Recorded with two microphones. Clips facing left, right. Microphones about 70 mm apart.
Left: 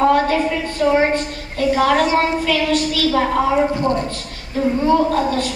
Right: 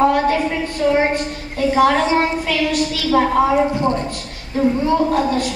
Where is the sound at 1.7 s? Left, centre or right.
Right.